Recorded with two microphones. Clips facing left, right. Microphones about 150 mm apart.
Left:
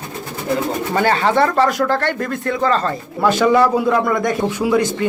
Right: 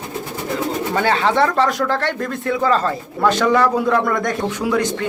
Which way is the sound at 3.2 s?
5° left (ahead or behind).